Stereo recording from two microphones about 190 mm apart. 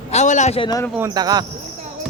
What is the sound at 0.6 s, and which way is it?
Speech, 20° left (ahead or behind).